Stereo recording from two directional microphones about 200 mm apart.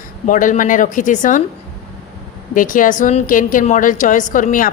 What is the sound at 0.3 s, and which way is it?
A woman's voice, 40° left (ahead or behind).